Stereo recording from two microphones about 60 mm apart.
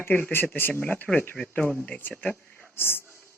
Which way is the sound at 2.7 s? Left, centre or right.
Left.